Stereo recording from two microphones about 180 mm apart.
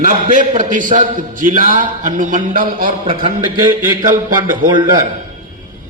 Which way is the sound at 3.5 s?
15° right (ahead or behind).